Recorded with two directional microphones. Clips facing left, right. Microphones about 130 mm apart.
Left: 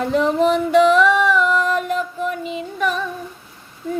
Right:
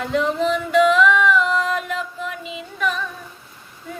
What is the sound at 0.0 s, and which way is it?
Female singing, 45° left (ahead or behind).